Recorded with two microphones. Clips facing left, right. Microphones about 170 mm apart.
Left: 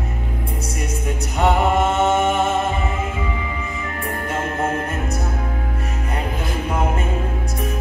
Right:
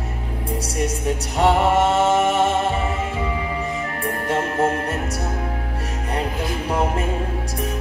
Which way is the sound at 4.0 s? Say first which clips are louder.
Right 2 dB; 30° right (ahead or behind).